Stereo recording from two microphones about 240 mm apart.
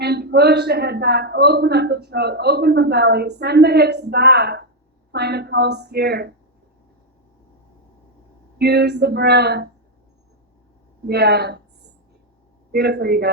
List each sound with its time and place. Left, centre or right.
0.0 s a man's voice: right
8.5 s a man's voice: right
11.0 s speech: right
12.7 s speech: right